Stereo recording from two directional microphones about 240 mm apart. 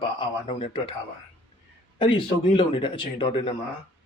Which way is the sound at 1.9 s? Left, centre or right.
Left.